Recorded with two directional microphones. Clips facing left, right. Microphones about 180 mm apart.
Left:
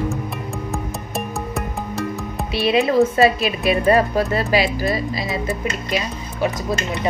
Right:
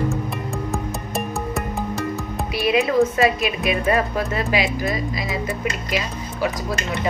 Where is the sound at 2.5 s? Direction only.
30° left (ahead or behind).